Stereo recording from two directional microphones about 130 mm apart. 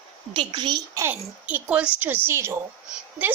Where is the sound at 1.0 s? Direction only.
15° right (ahead or behind).